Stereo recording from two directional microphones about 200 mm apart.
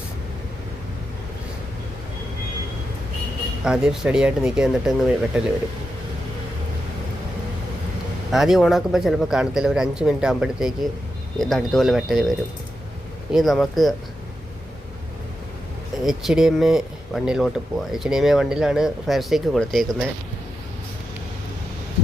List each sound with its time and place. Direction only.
3.6 s speech: 5° right (ahead or behind)
8.3 s speech: centre (ahead or behind)
13.3 s speech: centre (ahead or behind)
16.0 s speech: centre (ahead or behind)